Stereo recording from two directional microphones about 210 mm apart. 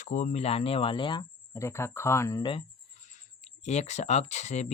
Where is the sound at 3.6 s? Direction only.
30° left (ahead or behind).